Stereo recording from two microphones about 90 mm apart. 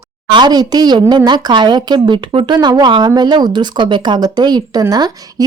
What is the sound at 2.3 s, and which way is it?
Speech, 70° right (ahead or behind).